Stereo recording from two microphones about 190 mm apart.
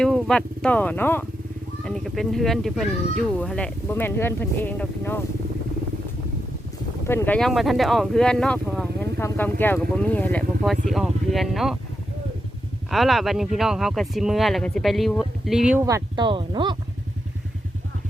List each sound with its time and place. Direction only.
0.0 s speech: centre (ahead or behind)
7.1 s speech: 5° left (ahead or behind)
12.9 s speech: centre (ahead or behind)
15.9 s speech: 20° right (ahead or behind)